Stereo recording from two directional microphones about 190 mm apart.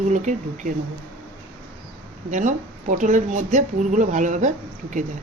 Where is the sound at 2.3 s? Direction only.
40° right (ahead or behind).